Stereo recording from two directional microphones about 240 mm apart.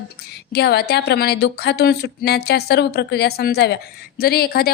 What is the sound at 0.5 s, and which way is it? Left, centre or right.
A woman's voice, left.